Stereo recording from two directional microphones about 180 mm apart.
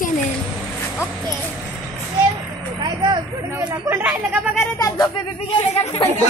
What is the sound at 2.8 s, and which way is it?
Speech, 25° right (ahead or behind).